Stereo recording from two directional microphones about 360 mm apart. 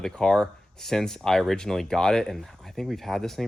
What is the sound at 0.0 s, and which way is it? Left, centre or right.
Speech, centre.